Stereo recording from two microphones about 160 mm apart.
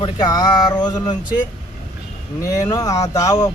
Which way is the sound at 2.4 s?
20° left (ahead or behind).